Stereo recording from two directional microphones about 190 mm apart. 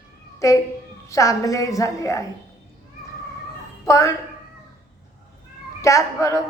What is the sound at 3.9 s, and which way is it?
Speech, 15° left (ahead or behind).